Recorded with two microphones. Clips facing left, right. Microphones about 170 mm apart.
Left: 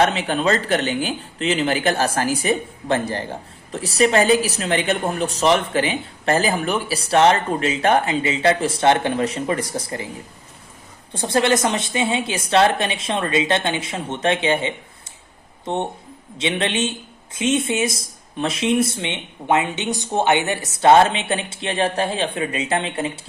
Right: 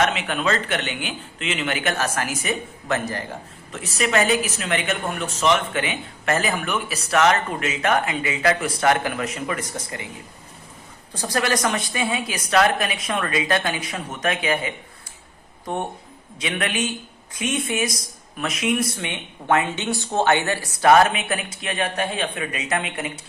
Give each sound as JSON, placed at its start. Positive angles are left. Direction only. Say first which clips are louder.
{"t": 0.0, "sound": "speech", "louder": "left 4 dB", "side_deg": 30}
{"t": 11.1, "sound": "speech", "louder": "left 5 dB", "side_deg": 25}